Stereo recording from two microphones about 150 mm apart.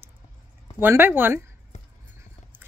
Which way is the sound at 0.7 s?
15° right (ahead or behind).